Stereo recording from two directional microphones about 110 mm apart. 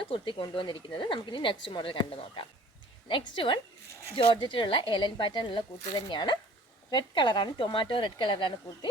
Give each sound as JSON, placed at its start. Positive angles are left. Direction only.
{"t": 0.0, "sound": "speech", "side_deg": 50}